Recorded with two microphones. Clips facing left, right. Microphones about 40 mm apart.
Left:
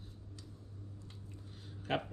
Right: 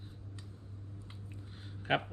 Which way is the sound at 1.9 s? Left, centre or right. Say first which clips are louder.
Right 4 dB; right.